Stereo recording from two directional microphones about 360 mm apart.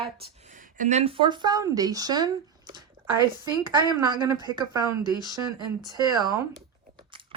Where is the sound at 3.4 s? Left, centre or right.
Centre.